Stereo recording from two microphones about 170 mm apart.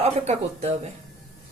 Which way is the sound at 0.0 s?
40° right (ahead or behind).